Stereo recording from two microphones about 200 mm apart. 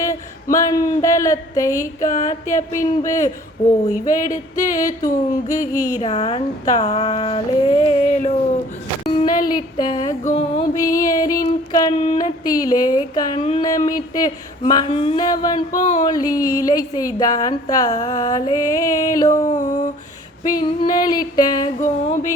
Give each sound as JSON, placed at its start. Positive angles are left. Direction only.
{"t": 0.0, "sound": "speech", "side_deg": 15}
{"t": 2.0, "sound": "music", "side_deg": 40}
{"t": 2.6, "sound": "speech", "side_deg": 15}
{"t": 4.1, "sound": "music", "side_deg": 40}
{"t": 4.5, "sound": "speech", "side_deg": 15}
{"t": 6.0, "sound": "music", "side_deg": 30}
{"t": 6.7, "sound": "speech", "side_deg": 30}
{"t": 10.2, "sound": "music", "side_deg": 30}
{"t": 10.8, "sound": "speech", "side_deg": 15}
{"t": 15.8, "sound": "music", "side_deg": 35}
{"t": 16.0, "sound": "speech", "side_deg": 20}
{"t": 19.5, "sound": "music", "side_deg": 35}
{"t": 20.5, "sound": "speech", "side_deg": 20}
{"t": 21.8, "sound": "music", "side_deg": 35}